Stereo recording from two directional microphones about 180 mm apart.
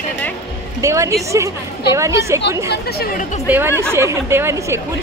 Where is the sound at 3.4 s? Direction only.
10° right (ahead or behind).